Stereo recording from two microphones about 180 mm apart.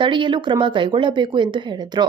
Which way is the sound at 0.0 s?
25° right (ahead or behind).